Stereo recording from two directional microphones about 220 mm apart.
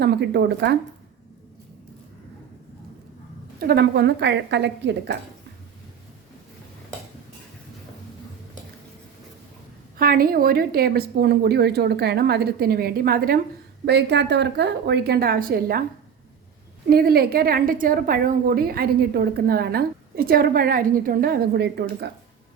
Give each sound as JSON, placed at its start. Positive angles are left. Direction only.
{"t": 0.0, "sound": "a woman's voice", "side_deg": -50}
{"t": 3.6, "sound": "a woman's voice", "side_deg": -45}
{"t": 10.0, "sound": "a woman's voice", "side_deg": -40}
{"t": 16.9, "sound": "a woman's voice", "side_deg": -45}